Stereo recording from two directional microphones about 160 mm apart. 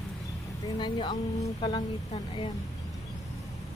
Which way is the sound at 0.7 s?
30° left (ahead or behind).